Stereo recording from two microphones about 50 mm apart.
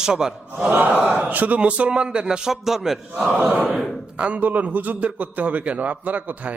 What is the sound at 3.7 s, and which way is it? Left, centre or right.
Speech, centre.